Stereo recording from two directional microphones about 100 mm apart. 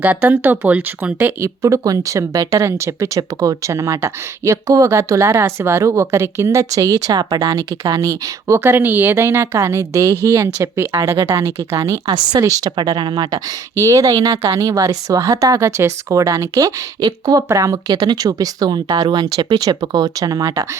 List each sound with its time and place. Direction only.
0.0 s speech: 15° right (ahead or behind)
1.6 s a woman's voice: 35° right (ahead or behind)
12.7 s a woman's voice: 45° right (ahead or behind)